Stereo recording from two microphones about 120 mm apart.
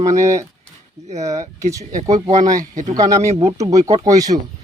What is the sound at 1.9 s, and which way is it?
Speech, 75° right (ahead or behind).